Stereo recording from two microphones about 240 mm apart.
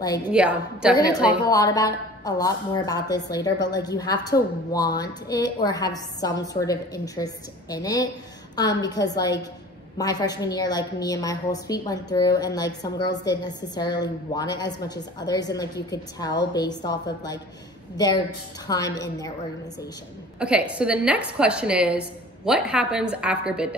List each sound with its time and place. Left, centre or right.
0.3 s a woman's voice: centre
1.5 s a woman's voice: centre
20.3 s a woman's voice: centre